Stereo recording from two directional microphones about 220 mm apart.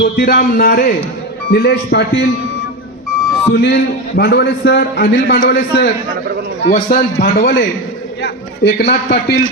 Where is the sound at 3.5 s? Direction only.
50° left (ahead or behind).